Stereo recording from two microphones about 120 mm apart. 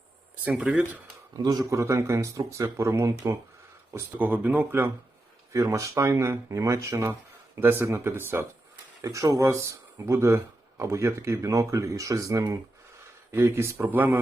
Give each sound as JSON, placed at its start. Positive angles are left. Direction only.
{"t": 0.5, "sound": "speech", "side_deg": -10}
{"t": 1.4, "sound": "speech", "side_deg": -30}